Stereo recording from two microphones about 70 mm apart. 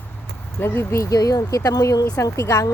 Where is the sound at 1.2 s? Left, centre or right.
Left.